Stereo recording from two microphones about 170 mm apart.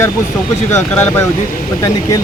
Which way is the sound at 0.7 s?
15° left (ahead or behind).